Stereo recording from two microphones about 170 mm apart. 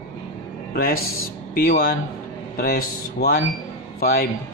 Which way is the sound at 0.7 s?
60° left (ahead or behind).